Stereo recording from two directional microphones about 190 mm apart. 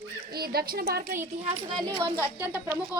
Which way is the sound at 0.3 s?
55° right (ahead or behind).